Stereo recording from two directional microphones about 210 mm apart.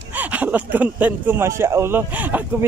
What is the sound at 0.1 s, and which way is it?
Speech, 10° right (ahead or behind).